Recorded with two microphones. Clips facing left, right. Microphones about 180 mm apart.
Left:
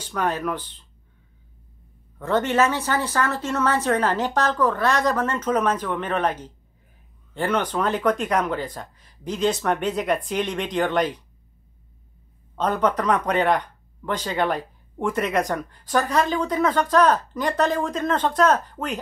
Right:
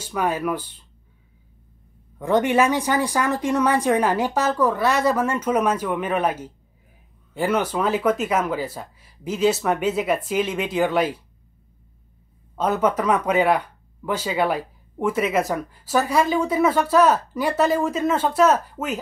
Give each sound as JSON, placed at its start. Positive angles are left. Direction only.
{"t": 0.0, "sound": "speech", "side_deg": -10}
{"t": 2.1, "sound": "speech", "side_deg": -15}
{"t": 12.5, "sound": "speech", "side_deg": -10}